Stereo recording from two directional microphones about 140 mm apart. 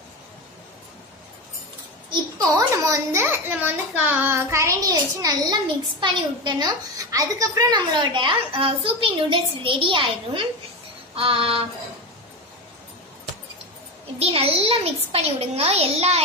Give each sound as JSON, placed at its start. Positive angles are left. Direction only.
{"t": 2.0, "sound": "a child's voice", "side_deg": -25}
{"t": 11.1, "sound": "a sound", "side_deg": -40}
{"t": 14.2, "sound": "a child's voice", "side_deg": -45}